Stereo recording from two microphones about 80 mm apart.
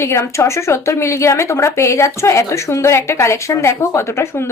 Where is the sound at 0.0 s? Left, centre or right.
Left.